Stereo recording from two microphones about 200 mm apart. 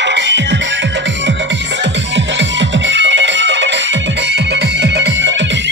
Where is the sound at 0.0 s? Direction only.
65° right (ahead or behind).